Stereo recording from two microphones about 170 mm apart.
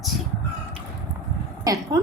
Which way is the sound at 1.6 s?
20° right (ahead or behind).